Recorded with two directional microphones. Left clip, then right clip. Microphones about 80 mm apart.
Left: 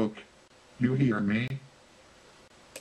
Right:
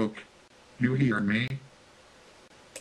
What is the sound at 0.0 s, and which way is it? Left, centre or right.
Speech, centre.